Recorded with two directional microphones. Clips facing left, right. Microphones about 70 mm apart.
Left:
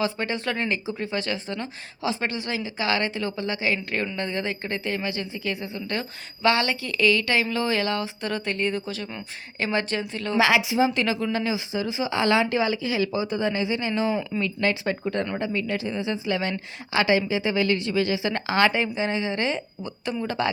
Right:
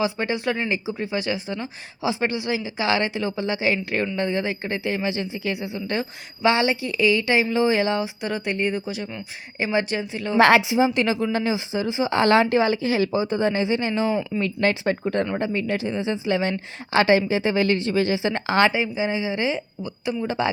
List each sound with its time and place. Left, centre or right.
0.0 s speech: centre
10.1 s speech: centre
10.3 s speech: right
10.6 s speech: right
18.9 s speech: centre
20.2 s speech: centre